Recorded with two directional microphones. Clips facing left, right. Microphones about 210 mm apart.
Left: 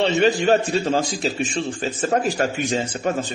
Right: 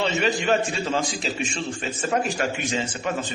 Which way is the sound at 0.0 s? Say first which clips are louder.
Left 6 dB; 35° left (ahead or behind).